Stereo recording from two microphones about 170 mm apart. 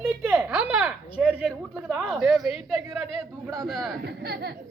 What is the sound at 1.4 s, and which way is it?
Speech, 5° right (ahead or behind).